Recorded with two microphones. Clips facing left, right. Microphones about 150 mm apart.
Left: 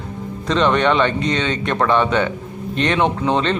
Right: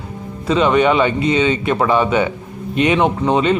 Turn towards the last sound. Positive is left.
turn(degrees=-10)  # may be behind; listen again after turning